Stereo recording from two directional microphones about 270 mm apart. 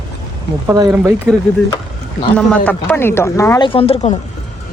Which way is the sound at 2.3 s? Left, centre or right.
Centre.